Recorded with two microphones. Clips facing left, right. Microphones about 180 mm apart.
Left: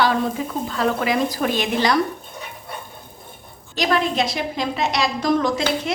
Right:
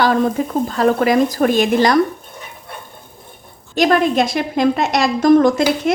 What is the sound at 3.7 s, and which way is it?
Speech, 50° right (ahead or behind).